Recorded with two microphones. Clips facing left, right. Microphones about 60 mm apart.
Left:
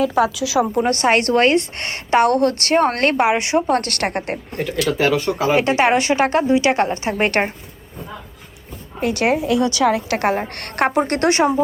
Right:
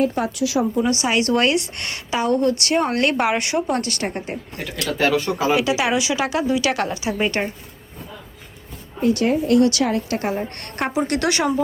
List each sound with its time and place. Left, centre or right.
0.1 s a woman's voice: left
0.8 s speech: left
1.3 s a woman's voice: left
2.1 s a woman's voice: left
2.6 s a woman's voice: left
3.2 s speech: left
3.7 s a woman's voice: left
4.9 s speech: centre
5.5 s speech: left
6.5 s a woman's voice: left
9.0 s a woman's voice: left
10.1 s a woman's voice: left
10.6 s a woman's voice: left